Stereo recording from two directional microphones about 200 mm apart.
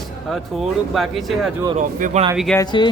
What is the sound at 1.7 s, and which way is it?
Speech, 40° right (ahead or behind).